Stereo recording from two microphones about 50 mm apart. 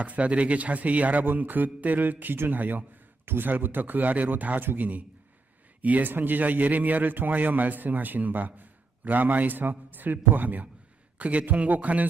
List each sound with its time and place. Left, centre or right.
0.0 s a man's voice: right